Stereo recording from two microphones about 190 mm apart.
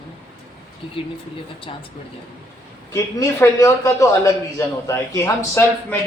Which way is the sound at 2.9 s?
15° left (ahead or behind).